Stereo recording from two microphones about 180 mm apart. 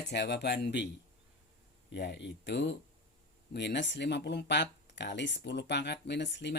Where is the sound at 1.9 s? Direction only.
70° left (ahead or behind).